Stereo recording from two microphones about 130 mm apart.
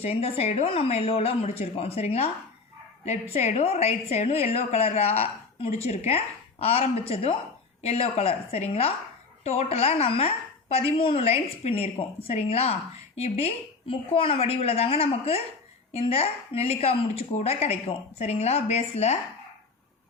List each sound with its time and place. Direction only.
0.0 s a woman's voice: 50° left (ahead or behind)